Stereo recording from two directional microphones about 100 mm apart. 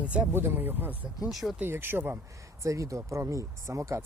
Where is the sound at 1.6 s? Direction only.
20° right (ahead or behind).